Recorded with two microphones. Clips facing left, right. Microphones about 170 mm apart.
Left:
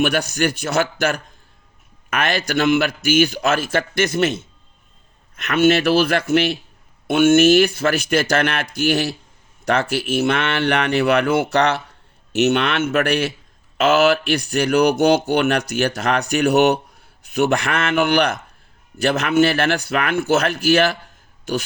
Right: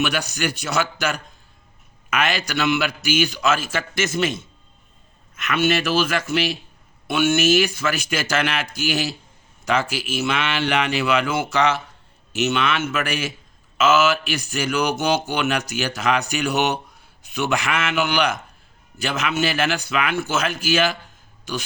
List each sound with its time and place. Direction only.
0.0 s a man's voice: 55° left (ahead or behind)